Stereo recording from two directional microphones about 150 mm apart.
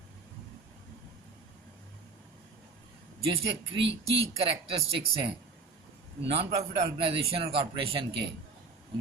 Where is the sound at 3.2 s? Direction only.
40° right (ahead or behind).